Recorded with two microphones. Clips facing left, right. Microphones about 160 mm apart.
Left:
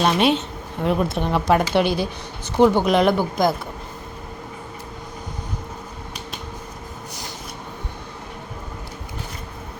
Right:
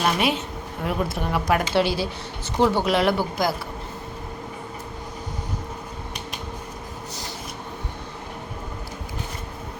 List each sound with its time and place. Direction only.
0.0 s speech: 25° left (ahead or behind)